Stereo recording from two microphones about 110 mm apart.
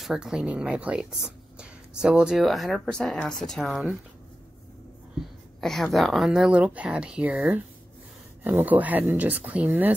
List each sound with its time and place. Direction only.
0.0 s speech: 5° right (ahead or behind)
5.6 s speech: 5° left (ahead or behind); by 9.9 s 15° right (ahead or behind)